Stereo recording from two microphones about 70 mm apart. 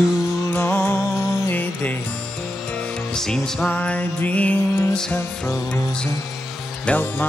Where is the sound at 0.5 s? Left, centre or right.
Left.